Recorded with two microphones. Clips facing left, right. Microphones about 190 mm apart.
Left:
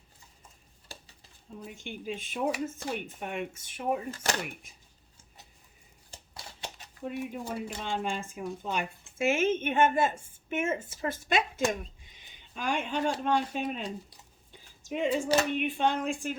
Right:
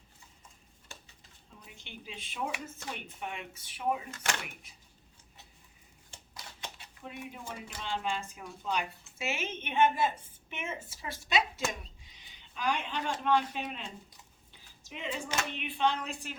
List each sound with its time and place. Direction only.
1.6 s speech: 50° left (ahead or behind)
4.1 s speech: 35° left (ahead or behind)
6.1 s shuffling cards: 35° left (ahead or behind)
7.0 s a woman's voice: 45° left (ahead or behind)